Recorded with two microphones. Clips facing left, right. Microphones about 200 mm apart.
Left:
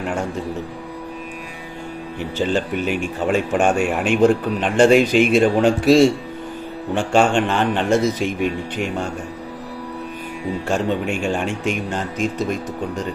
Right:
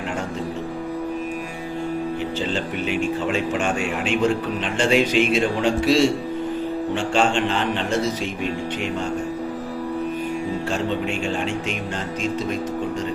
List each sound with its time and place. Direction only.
2.4 s speech: 50° left (ahead or behind)
10.7 s speech: 50° left (ahead or behind)